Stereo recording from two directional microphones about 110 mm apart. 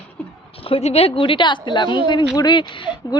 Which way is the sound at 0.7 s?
65° left (ahead or behind).